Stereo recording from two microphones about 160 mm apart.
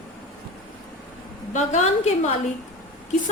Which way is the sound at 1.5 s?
45° left (ahead or behind).